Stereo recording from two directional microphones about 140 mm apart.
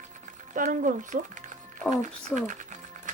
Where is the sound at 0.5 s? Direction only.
70° right (ahead or behind).